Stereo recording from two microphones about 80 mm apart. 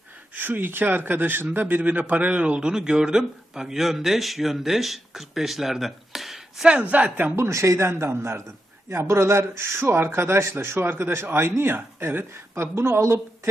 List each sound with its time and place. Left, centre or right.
0.3 s a man's voice: right; by 6.7 s centre
6.9 s speech: centre
7.3 s speech: right